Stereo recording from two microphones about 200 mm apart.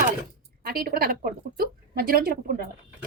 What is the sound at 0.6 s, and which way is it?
A woman's voice, 50° right (ahead or behind).